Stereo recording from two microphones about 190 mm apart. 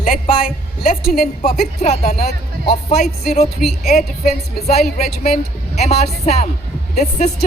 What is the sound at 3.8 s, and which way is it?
A woman's voice, 35° left (ahead or behind).